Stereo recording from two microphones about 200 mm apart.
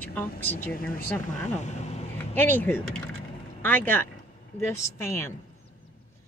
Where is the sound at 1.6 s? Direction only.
35° left (ahead or behind).